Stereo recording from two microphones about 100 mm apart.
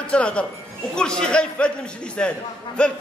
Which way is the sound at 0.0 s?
10° left (ahead or behind).